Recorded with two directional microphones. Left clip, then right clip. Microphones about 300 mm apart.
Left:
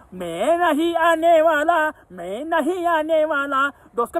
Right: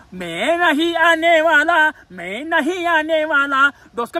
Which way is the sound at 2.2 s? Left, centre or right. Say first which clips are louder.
Right 2 dB; right.